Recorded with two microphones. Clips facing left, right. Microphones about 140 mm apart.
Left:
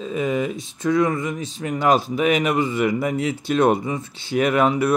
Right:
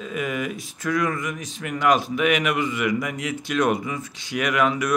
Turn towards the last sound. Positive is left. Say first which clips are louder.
# left 4 dB
turn(degrees=30)  # may be behind; listen again after turning